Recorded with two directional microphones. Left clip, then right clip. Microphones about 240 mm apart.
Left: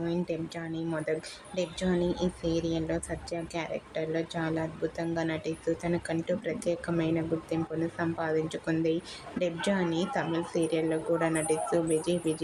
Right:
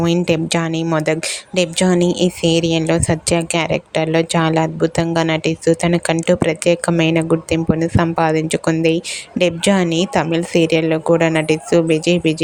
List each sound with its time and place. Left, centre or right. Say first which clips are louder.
0.3 s speech: right 18 dB; right